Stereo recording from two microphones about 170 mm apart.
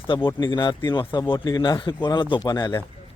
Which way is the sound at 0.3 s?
25° left (ahead or behind).